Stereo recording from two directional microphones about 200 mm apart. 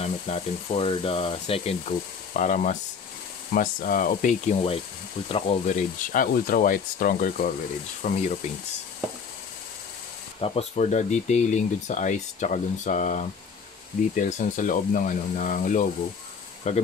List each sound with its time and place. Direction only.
0.0 s speech: 30° left (ahead or behind)
6.1 s speech: 45° left (ahead or behind)
10.4 s speech: 30° left (ahead or behind)